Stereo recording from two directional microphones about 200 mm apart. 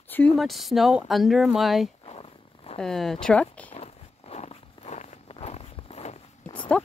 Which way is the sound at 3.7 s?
30° left (ahead or behind).